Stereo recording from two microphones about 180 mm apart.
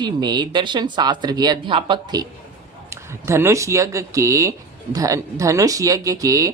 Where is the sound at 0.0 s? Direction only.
25° right (ahead or behind).